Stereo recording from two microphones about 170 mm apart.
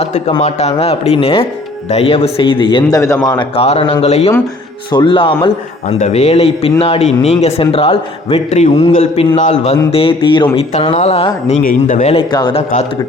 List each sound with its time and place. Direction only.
0.0 s a man's voice: 35° left (ahead or behind)
5.9 s a man's voice: 40° left (ahead or behind)
11.6 s a man's voice: 55° left (ahead or behind)
12.1 s speech: 25° left (ahead or behind)